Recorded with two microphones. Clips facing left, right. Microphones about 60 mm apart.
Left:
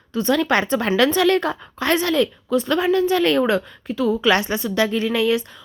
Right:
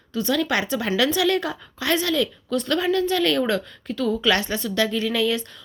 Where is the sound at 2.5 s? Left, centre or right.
Centre.